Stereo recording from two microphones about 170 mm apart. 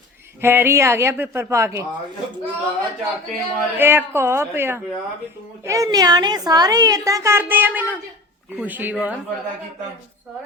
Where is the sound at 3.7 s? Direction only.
15° right (ahead or behind).